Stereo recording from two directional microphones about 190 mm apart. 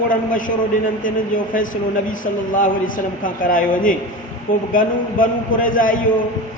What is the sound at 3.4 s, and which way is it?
A man's voice, 45° left (ahead or behind).